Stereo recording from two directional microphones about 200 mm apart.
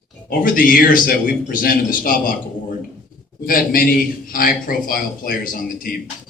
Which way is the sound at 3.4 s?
45° left (ahead or behind).